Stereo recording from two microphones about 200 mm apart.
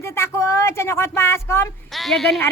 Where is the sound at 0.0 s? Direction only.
15° left (ahead or behind).